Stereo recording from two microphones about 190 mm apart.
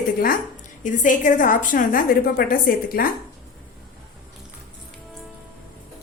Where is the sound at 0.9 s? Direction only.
40° left (ahead or behind).